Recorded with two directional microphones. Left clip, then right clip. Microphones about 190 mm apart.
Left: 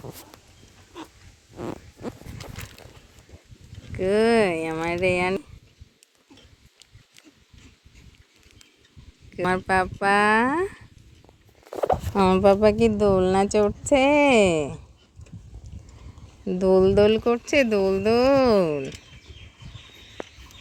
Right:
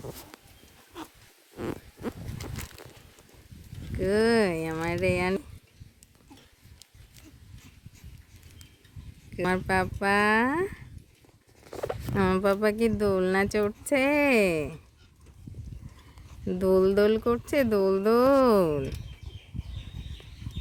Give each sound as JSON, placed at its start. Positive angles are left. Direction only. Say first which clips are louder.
{"t": 0.9, "sound": "a sound", "louder": "left 2 dB", "side_deg": -10}
{"t": 3.9, "sound": "a sound", "louder": "left 4 dB", "side_deg": 10}
{"t": 9.3, "sound": "speech", "louder": "left 4 dB", "side_deg": 0}
{"t": 12.1, "sound": "speech", "louder": "left 5 dB", "side_deg": 5}
{"t": 12.4, "sound": "speech", "louder": "left 9 dB", "side_deg": 15}
{"t": 16.5, "sound": "speech", "louder": "left 4 dB", "side_deg": 10}